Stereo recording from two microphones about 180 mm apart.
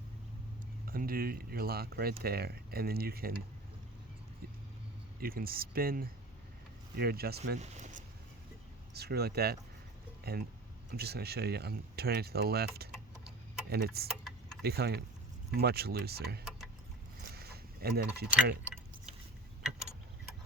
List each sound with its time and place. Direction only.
0.9 s speech: 55° right (ahead or behind)
5.2 s speech: 55° right (ahead or behind)
7.6 s a sound: 40° right (ahead or behind)
9.0 s speech: 60° right (ahead or behind)
10.9 s speech: 60° right (ahead or behind)